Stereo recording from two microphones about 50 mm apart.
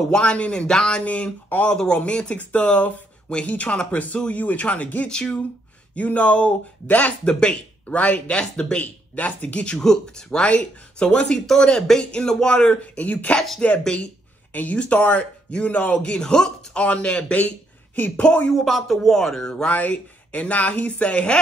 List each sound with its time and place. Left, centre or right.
0.1 s a man's voice: left
5.0 s a man's voice: centre
8.8 s a man's voice: left
9.8 s a man's voice: centre
11.3 s a man's voice: centre
18.5 s speech: centre
19.7 s a man's voice: left